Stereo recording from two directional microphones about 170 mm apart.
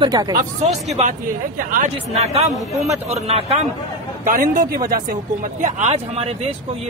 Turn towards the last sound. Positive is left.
turn(degrees=-40)  # may be behind; listen again after turning